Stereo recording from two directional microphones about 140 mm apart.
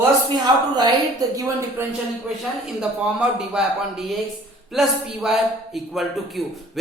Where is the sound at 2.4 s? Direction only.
5° right (ahead or behind).